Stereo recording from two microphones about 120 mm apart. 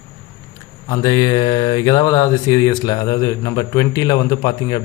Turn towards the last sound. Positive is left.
turn(degrees=30)  # may be behind; listen again after turning